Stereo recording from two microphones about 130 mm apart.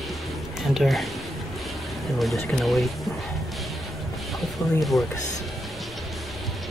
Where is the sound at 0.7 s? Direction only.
Centre (ahead or behind).